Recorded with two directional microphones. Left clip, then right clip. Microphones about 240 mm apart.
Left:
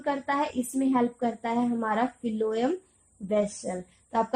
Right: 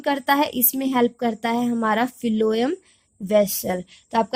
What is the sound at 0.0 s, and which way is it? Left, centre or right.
A woman's voice, right.